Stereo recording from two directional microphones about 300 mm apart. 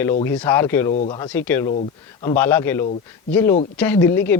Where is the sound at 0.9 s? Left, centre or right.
Left.